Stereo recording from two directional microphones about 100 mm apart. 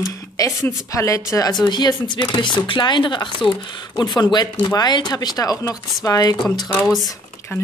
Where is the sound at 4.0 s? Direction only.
45° left (ahead or behind).